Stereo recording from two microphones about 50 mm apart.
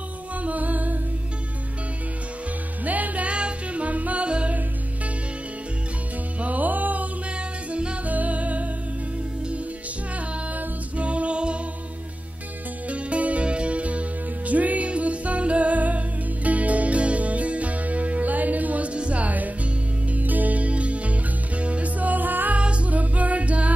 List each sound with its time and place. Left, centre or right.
0.4 s humming: right
2.8 s music: right
6.4 s music: right
8.1 s music: right
11.0 s music: right
12.9 s music: right
22.6 s music: right